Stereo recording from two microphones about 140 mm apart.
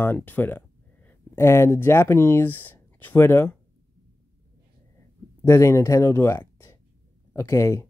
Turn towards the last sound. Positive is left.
turn(degrees=20)  # may be behind; listen again after turning